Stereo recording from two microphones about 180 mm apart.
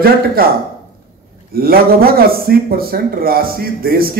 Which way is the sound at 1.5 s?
55° right (ahead or behind).